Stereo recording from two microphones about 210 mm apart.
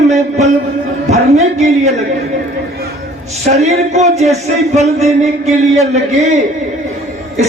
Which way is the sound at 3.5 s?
30° right (ahead or behind).